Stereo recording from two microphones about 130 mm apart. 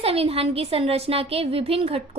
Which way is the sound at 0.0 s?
50° right (ahead or behind).